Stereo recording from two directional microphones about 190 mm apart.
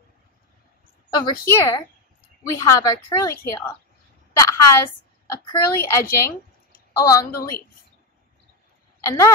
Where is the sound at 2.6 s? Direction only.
15° left (ahead or behind).